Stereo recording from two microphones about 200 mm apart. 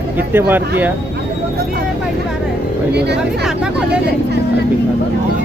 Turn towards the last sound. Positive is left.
turn(degrees=-5)  # may be behind; listen again after turning